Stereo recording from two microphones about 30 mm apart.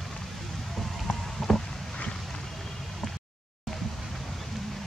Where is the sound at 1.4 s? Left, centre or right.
Centre.